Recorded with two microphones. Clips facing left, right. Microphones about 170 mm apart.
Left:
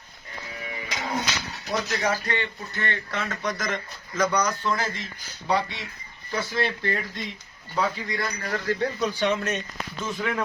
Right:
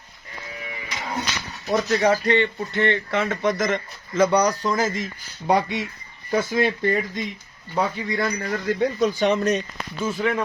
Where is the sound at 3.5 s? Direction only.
50° right (ahead or behind).